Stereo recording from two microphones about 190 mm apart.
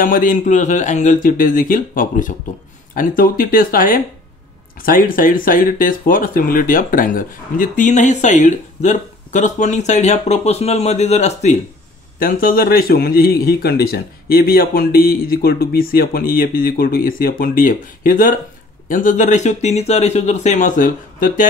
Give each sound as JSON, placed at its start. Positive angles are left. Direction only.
{"t": 0.0, "sound": "a man's voice", "side_deg": 45}
{"t": 12.2, "sound": "a man's voice", "side_deg": 50}